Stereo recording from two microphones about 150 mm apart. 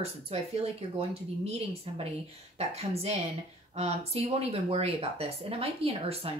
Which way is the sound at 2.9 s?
45° right (ahead or behind).